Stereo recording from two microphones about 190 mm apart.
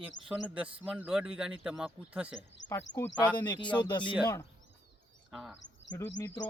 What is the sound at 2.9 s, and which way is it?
Speech, 75° left (ahead or behind).